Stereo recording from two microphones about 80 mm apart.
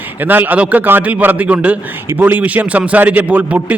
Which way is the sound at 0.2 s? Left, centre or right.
Right.